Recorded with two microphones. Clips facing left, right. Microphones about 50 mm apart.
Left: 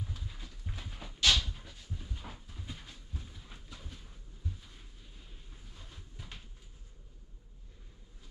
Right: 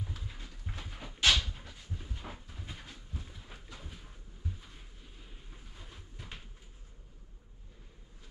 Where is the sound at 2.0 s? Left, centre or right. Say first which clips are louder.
Right 3 dB; centre.